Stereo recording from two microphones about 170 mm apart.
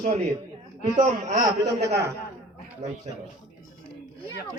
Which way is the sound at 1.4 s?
20° right (ahead or behind).